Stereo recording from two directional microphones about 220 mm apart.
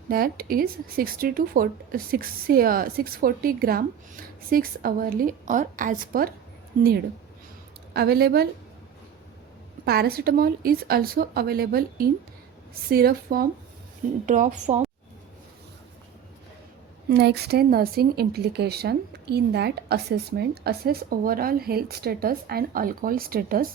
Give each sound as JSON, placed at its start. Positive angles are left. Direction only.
{"t": 0.1, "sound": "speech", "side_deg": -40}
{"t": 7.9, "sound": "speech", "side_deg": -45}
{"t": 9.8, "sound": "speech", "side_deg": -45}
{"t": 17.1, "sound": "speech", "side_deg": -45}